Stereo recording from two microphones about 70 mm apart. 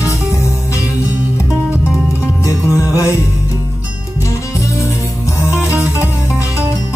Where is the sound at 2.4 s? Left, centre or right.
Left.